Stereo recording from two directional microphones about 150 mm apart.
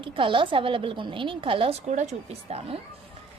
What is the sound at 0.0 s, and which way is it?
Speech, 35° right (ahead or behind).